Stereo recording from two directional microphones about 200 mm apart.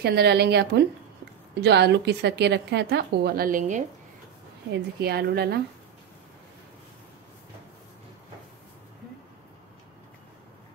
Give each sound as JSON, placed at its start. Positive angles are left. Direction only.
{"t": 0.0, "sound": "speech", "side_deg": -55}
{"t": 5.0, "sound": "a woman's voice", "side_deg": -50}